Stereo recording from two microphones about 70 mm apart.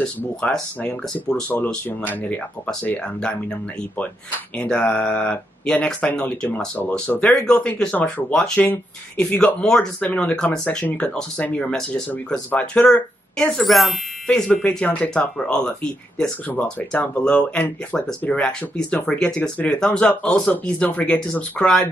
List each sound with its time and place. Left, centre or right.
0.0 s speech: centre
1.9 s speech: left
4.6 s speech: centre
7.2 s speech: centre
7.5 s speech: centre
8.5 s speech: left